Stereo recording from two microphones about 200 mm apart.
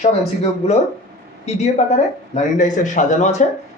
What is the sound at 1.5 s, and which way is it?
Speech, 35° left (ahead or behind).